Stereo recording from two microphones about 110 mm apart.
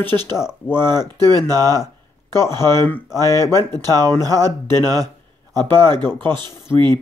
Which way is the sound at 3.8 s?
35° right (ahead or behind).